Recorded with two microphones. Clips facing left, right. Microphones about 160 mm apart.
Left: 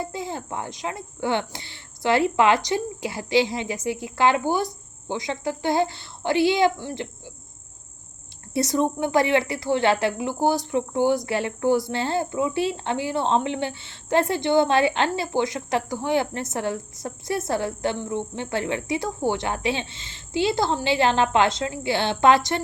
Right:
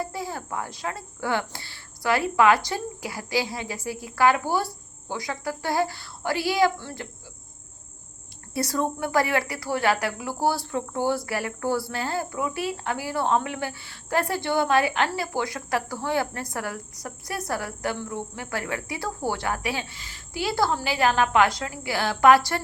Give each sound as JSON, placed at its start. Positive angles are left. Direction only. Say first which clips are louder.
{"t": 0.0, "sound": "speech", "louder": "left 1 dB", "side_deg": 20}
{"t": 8.5, "sound": "speech", "louder": "left 4 dB", "side_deg": 20}